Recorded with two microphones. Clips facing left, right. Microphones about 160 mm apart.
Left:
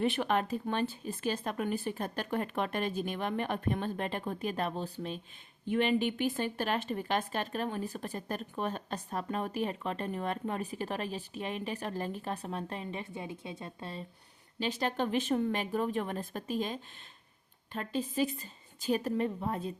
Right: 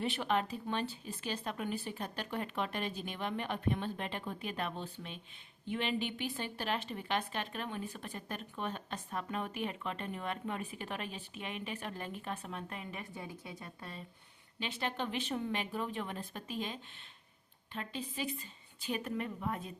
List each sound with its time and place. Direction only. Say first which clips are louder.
0.0 s speech: left 4 dB; 55° left (ahead or behind); by 5.2 s 40° left (ahead or behind)
5.6 s a woman's voice: left 7 dB; 50° left (ahead or behind); by 14.0 s 25° left (ahead or behind)
14.6 s a woman's voice: left 6 dB; 40° left (ahead or behind)